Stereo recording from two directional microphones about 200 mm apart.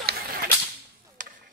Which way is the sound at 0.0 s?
50° right (ahead or behind).